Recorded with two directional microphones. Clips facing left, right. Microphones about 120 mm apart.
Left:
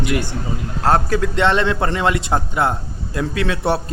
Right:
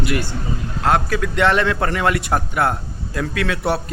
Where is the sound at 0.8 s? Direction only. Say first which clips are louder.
Left 2 dB; 35° left (ahead or behind).